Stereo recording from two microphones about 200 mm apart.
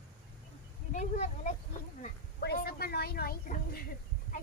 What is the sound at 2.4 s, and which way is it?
Speech, 50° left (ahead or behind).